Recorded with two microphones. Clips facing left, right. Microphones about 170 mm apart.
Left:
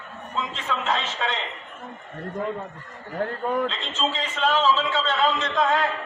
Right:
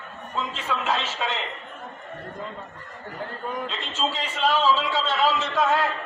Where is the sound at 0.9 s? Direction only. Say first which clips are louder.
Left 1 dB; 10° right (ahead or behind).